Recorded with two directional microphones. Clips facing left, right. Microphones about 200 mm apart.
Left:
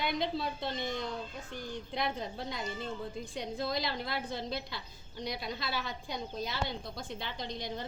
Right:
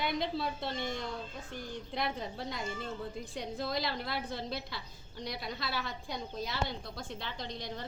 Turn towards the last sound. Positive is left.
turn(degrees=0)  # may be behind; listen again after turning